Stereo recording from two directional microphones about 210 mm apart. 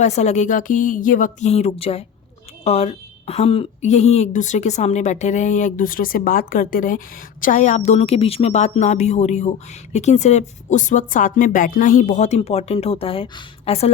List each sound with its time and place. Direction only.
0.0 s a woman's voice: 35° left (ahead or behind)